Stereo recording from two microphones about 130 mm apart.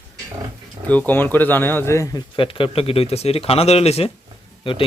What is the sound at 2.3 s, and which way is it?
Speech, 40° left (ahead or behind).